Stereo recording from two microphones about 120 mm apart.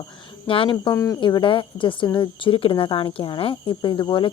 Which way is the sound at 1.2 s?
40° left (ahead or behind).